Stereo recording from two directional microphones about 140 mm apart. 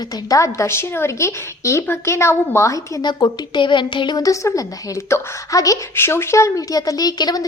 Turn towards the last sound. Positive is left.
turn(degrees=30)  # may be behind; listen again after turning